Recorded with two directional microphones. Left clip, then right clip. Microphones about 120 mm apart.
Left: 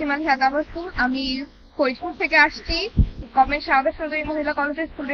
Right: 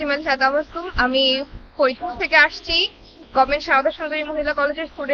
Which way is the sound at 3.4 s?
30° right (ahead or behind).